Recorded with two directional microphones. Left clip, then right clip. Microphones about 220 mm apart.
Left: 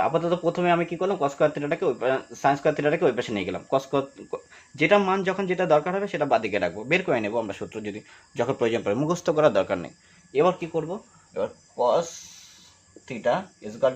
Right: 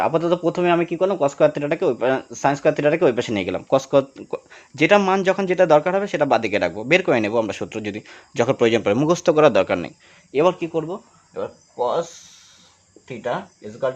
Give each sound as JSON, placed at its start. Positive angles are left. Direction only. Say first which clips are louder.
{"t": 0.0, "sound": "speech", "louder": "right 4 dB", "side_deg": -50}
{"t": 10.3, "sound": "speech", "louder": "right 4 dB", "side_deg": -45}
{"t": 11.3, "sound": "speech", "louder": "right 1 dB", "side_deg": -20}